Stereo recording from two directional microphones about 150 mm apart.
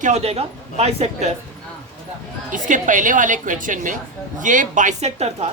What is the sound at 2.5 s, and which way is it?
A woman's voice, 60° right (ahead or behind).